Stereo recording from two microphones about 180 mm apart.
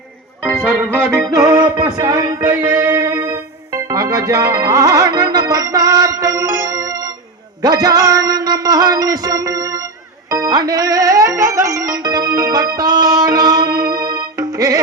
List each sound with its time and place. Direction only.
0.7 s music: 5° left (ahead or behind)
1.3 s music: 20° right (ahead or behind)
7.6 s a man's voice: 20° right (ahead or behind)
10.2 s music: 20° right (ahead or behind)